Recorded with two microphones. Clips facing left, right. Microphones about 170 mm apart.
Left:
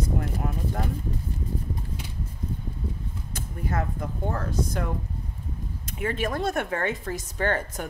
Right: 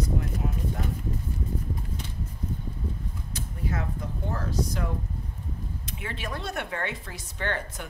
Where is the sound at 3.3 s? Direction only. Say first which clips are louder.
Left 2 dB; 50° left (ahead or behind).